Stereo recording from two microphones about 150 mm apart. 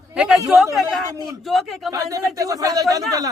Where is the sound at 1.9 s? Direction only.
25° right (ahead or behind).